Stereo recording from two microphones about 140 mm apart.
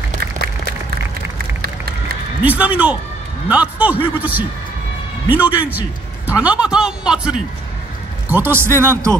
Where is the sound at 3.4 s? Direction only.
10° right (ahead or behind).